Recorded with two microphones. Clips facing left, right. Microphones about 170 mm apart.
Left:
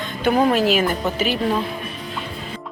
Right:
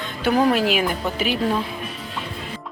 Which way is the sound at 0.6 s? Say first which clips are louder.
Left 3 dB; 45° left (ahead or behind).